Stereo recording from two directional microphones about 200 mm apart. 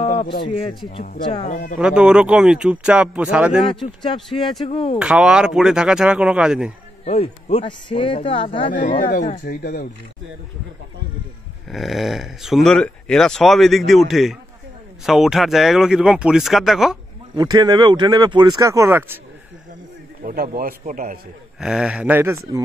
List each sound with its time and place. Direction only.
0.0 s speech: 30° left (ahead or behind)
1.8 s speech: 5° right (ahead or behind)
3.8 s speech: 25° left (ahead or behind)
4.9 s speech: 5° right (ahead or behind)
7.1 s speech: 30° left (ahead or behind)
9.0 s speech: 40° left (ahead or behind)
11.7 s speech: centre (ahead or behind)
17.4 s speech: 20° right (ahead or behind)
20.2 s a man's voice: 45° right (ahead or behind)
21.5 s speech: 5° right (ahead or behind)